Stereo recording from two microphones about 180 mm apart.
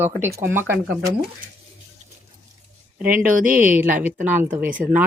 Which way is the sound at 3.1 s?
50° right (ahead or behind).